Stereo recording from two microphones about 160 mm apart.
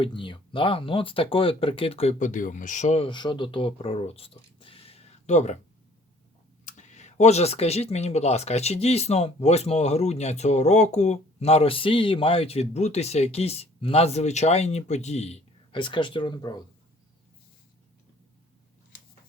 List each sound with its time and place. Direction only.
0.0 s speech: 30° left (ahead or behind)
6.7 s speech: 45° left (ahead or behind); by 16.6 s 25° left (ahead or behind)